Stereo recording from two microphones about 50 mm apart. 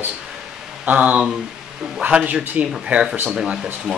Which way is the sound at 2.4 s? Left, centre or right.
Right.